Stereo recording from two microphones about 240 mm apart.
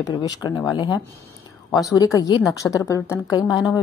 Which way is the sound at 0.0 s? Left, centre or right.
Centre.